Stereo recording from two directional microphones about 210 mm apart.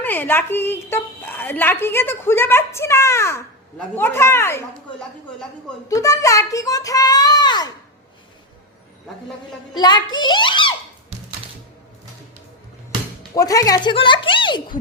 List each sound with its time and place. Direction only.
0.0 s a woman's voice: 10° left (ahead or behind)
5.9 s a woman's voice: 15° left (ahead or behind)
9.7 s speech: 20° left (ahead or behind)
13.3 s speech: 15° left (ahead or behind)